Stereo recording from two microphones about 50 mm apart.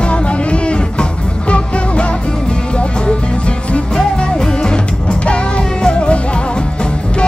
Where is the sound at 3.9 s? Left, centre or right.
Centre.